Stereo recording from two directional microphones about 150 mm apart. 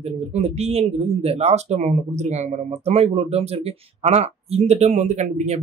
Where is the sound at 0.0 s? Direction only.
45° right (ahead or behind).